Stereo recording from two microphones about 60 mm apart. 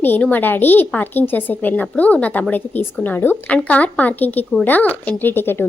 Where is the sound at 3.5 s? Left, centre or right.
Left.